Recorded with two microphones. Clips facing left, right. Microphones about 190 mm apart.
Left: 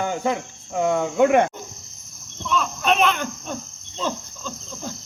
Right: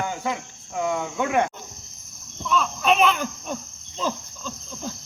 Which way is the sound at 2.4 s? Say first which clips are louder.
Even; centre (ahead or behind).